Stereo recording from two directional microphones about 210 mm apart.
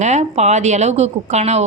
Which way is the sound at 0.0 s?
35° right (ahead or behind).